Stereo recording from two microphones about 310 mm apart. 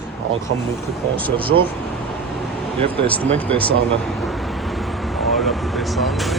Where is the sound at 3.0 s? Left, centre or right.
Centre.